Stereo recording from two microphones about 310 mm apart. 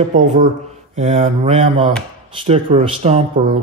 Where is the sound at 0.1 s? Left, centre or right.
Right.